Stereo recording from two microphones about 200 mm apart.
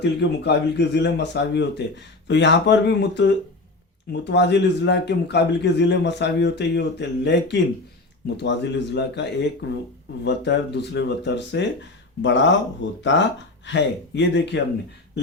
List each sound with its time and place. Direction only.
0.0 s speech: 60° left (ahead or behind)